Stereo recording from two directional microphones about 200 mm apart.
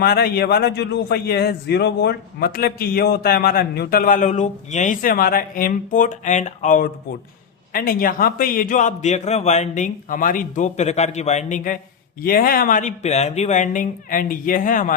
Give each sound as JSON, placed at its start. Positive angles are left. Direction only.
{"t": 0.0, "sound": "a man's voice", "side_deg": 50}